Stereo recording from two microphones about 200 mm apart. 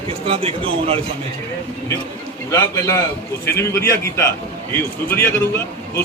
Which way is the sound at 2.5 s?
15° left (ahead or behind).